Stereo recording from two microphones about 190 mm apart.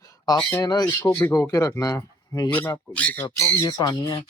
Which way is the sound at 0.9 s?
10° left (ahead or behind).